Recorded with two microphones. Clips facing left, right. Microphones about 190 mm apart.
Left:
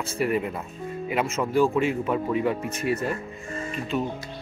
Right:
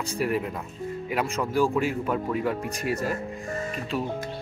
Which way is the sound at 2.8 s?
40° right (ahead or behind).